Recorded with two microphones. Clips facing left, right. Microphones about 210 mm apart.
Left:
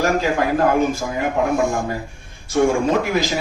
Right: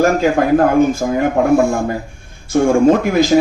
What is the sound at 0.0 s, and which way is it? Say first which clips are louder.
Speech: right 5 dB; 50° right (ahead or behind).